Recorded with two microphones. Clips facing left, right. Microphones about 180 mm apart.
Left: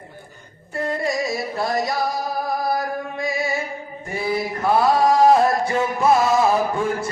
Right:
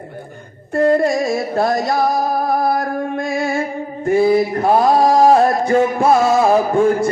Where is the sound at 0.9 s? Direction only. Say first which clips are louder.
Right 7 dB; 55° right (ahead or behind).